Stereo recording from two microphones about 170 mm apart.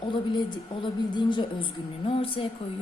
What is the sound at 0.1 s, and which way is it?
A woman's voice, 25° left (ahead or behind).